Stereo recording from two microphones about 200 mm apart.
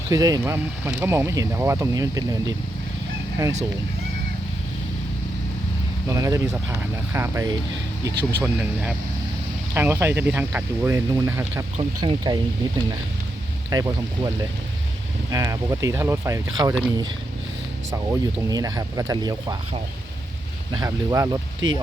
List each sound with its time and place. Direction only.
0.1 s speech: 20° right (ahead or behind)
6.1 s speech: 15° right (ahead or behind)
11.8 s speech: 20° right (ahead or behind)
15.3 s speech: 15° right (ahead or behind)
17.9 s speech: 15° right (ahead or behind)
20.7 s speech: 15° right (ahead or behind)